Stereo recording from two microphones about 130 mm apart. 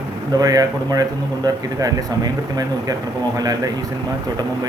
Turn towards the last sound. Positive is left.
turn(degrees=-30)  # may be behind; listen again after turning